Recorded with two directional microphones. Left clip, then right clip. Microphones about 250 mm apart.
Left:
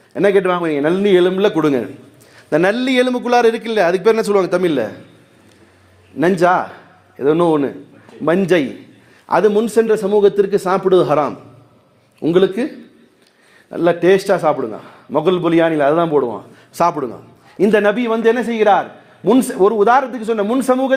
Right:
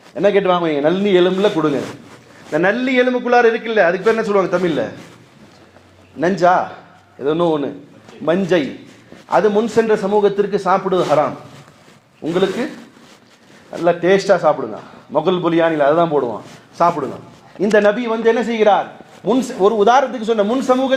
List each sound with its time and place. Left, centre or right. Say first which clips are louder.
0.1 s a man's voice: even; left
6.1 s a man's voice: even; left
13.7 s a man's voice: left 1 dB; left